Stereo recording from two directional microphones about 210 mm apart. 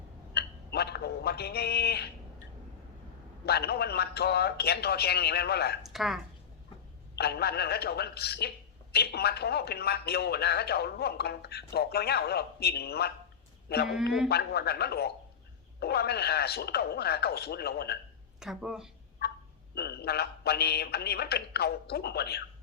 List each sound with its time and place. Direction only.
0.3 s a sound: 50° left (ahead or behind)
3.4 s a man's voice: 50° left (ahead or behind)
5.8 s speech: centre (ahead or behind)
7.2 s a man's voice: 50° left (ahead or behind)
18.3 s speech: 5° right (ahead or behind)
19.7 s a man's voice: 50° left (ahead or behind)